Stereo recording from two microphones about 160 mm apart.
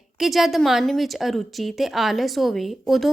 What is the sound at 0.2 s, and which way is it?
A woman's voice, centre (ahead or behind).